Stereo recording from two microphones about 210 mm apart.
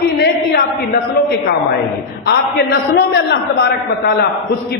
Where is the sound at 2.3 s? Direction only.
50° left (ahead or behind).